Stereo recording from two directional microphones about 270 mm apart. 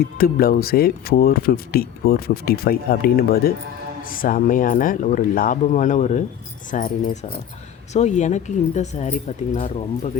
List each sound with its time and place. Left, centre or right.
0.0 s speech: left